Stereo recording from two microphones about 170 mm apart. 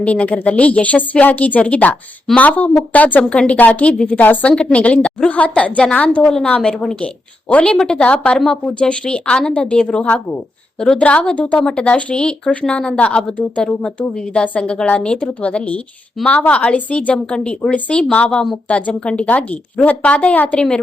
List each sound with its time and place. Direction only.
0.0 s a woman's voice: 10° left (ahead or behind)